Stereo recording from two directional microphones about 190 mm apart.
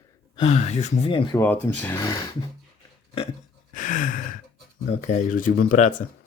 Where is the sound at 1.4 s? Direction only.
10° left (ahead or behind).